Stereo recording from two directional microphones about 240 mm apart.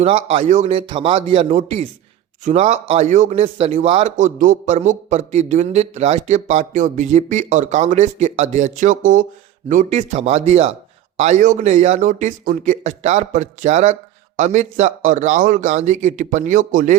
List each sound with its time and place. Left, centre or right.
0.0 s a man's voice: right